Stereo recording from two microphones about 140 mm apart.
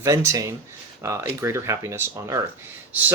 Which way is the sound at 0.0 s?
25° right (ahead or behind).